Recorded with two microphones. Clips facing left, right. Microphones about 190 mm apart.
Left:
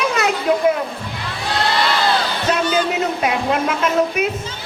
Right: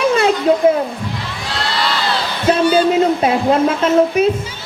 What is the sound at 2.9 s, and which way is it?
Speech, 30° right (ahead or behind).